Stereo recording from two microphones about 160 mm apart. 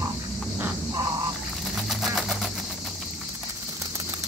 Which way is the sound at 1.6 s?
Centre (ahead or behind).